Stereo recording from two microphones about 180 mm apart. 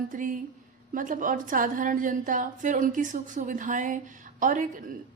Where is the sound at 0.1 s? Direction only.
45° right (ahead or behind).